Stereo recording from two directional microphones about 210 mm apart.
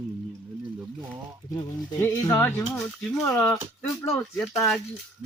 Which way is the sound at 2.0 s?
10° left (ahead or behind).